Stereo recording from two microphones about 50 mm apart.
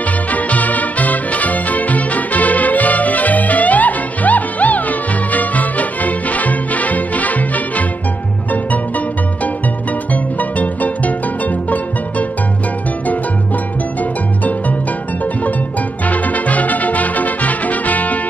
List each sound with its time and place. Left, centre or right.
0.3 s music: left
10.6 s music: left
16.1 s music: left